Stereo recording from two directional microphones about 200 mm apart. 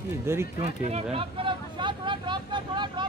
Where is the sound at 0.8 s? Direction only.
30° right (ahead or behind).